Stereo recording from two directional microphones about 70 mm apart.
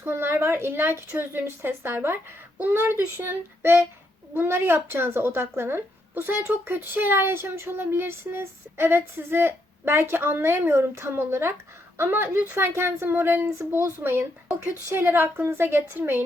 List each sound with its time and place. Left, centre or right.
0.0 s a woman's voice: right